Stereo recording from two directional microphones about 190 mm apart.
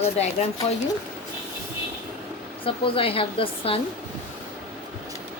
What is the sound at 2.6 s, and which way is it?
Speech, 30° left (ahead or behind).